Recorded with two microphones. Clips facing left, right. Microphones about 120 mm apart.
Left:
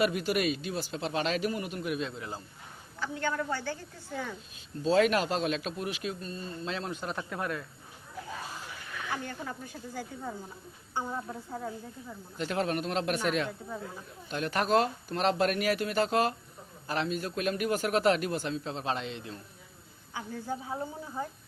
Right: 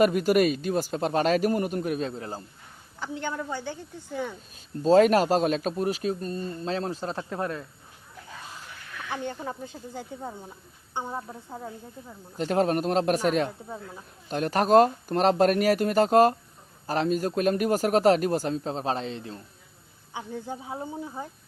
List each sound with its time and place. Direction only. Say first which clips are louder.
0.0 s a man's voice: right 7 dB; 45° right (ahead or behind)
3.0 s a woman's voice: even; 20° right (ahead or behind)
4.8 s a man's voice: right 7 dB; 40° right (ahead or behind)
9.2 s a woman's voice: right 5 dB; 20° right (ahead or behind)
12.4 s a man's voice: right 7 dB; 40° right (ahead or behind)
20.1 s speech: right 1 dB; 20° right (ahead or behind)